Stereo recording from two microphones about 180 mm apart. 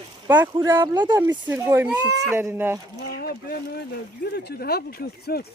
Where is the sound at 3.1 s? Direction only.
55° left (ahead or behind).